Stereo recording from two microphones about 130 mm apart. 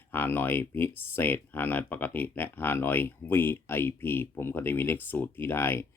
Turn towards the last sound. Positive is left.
turn(degrees=15)  # may be behind; listen again after turning